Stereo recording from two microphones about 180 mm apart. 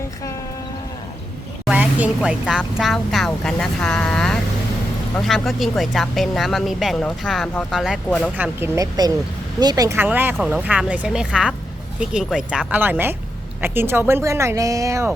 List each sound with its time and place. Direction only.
1.6 s speech: 10° right (ahead or behind)
8.4 s speech: 15° right (ahead or behind)